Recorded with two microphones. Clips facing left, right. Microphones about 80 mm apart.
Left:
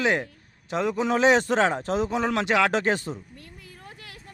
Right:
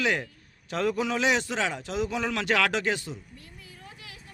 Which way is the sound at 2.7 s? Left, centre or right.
Left.